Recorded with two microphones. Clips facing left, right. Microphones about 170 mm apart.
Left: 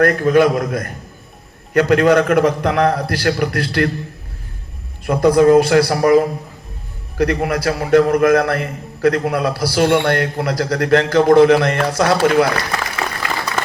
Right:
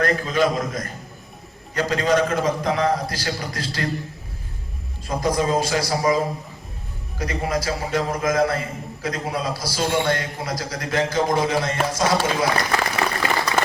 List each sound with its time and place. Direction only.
0.0 s a man's voice: 60° left (ahead or behind)
5.0 s a man's voice: 65° left (ahead or behind)